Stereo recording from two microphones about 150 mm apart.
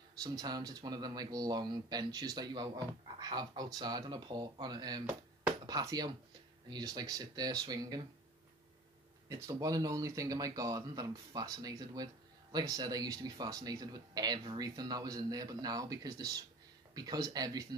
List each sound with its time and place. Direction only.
0.2 s speech: 25° right (ahead or behind)
9.3 s speech: 20° right (ahead or behind)